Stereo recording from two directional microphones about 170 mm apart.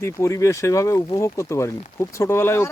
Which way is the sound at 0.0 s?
15° left (ahead or behind).